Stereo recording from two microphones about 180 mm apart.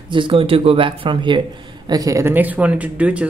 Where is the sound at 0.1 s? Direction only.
30° right (ahead or behind).